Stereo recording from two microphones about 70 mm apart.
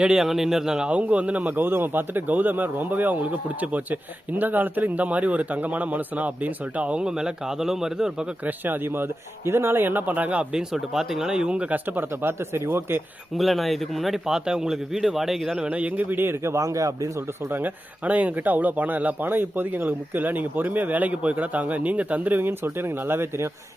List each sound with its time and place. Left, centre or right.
0.0 s a man's voice: centre
8.4 s a man's voice: right
10.5 s a man's voice: centre; by 13.0 s right
13.3 s speech: centre; by 17.5 s right
17.5 s a man's voice: right